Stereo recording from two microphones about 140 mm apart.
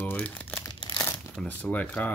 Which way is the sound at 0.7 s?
25° left (ahead or behind).